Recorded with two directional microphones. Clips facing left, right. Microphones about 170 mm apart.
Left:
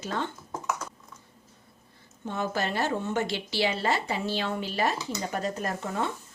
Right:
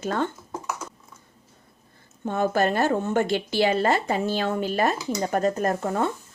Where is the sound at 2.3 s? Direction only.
50° right (ahead or behind).